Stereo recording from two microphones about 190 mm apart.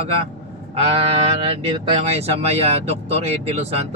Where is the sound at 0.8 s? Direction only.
35° right (ahead or behind).